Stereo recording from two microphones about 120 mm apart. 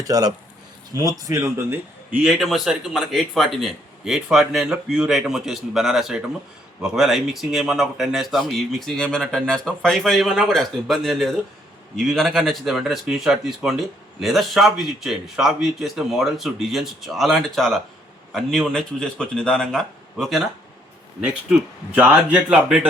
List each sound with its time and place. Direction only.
0.0 s speech: 35° right (ahead or behind); by 20.4 s 5° left (ahead or behind)
21.5 s speech: 10° right (ahead or behind)